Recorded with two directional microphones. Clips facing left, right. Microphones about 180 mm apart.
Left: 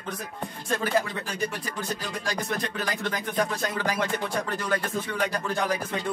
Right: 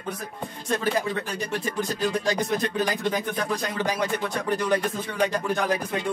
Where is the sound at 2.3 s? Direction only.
15° right (ahead or behind).